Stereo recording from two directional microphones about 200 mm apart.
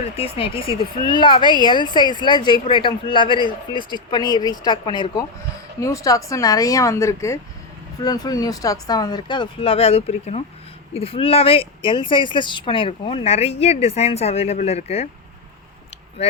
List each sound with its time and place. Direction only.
0.2 s a woman's voice: 25° left (ahead or behind)